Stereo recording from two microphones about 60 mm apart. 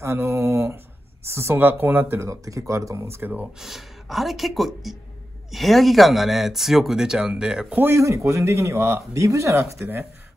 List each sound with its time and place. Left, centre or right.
0.0 s speech: right
2.1 s speech: right
3.2 s speech: right
3.5 s speech: centre
7.9 s speech: right